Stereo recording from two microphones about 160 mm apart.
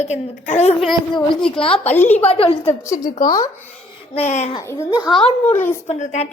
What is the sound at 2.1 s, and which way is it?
Speech, 40° left (ahead or behind).